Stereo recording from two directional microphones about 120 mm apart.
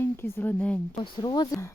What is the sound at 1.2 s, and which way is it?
Speech, 35° left (ahead or behind).